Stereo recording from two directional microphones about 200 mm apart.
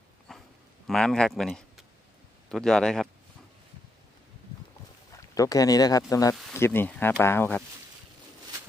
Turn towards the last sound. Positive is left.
turn(degrees=10)  # may be behind; listen again after turning